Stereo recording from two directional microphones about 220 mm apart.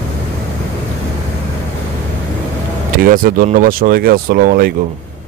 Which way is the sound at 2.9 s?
40° right (ahead or behind).